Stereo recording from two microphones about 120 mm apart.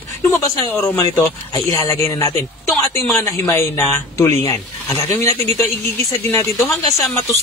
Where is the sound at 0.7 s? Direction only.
20° left (ahead or behind).